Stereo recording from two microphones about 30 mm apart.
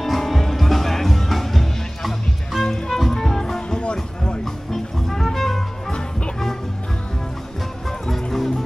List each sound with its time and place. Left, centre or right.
0.0 s music: centre
3.7 s music: left
4.7 s music: centre
5.9 s music: left
8.1 s music: centre